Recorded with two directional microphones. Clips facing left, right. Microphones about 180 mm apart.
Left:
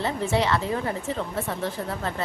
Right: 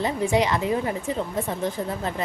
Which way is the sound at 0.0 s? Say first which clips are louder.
Right 2 dB; 15° right (ahead or behind).